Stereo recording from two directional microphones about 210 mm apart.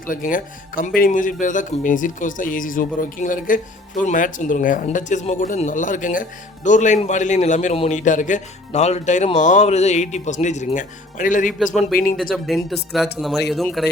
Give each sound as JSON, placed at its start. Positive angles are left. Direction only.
{"t": 0.1, "sound": "a man's voice", "side_deg": 40}
{"t": 12.1, "sound": "speech", "side_deg": 0}